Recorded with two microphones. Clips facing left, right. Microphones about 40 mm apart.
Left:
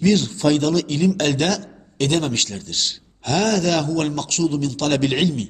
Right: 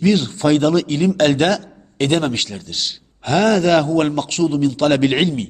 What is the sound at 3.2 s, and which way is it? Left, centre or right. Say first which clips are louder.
Speech: right 4 dB; right.